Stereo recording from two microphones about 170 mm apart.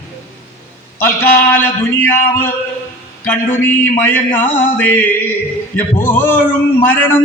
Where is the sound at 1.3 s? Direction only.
10° left (ahead or behind).